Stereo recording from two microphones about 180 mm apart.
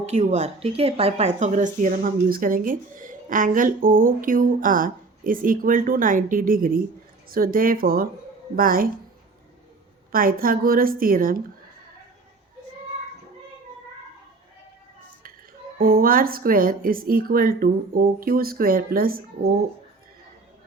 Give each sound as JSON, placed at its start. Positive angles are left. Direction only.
{"t": 0.0, "sound": "a woman's voice", "side_deg": -40}
{"t": 10.1, "sound": "a woman's voice", "side_deg": -55}
{"t": 15.8, "sound": "a woman's voice", "side_deg": -55}